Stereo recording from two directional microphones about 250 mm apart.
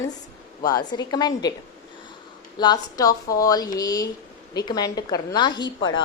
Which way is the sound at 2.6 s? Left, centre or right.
Centre.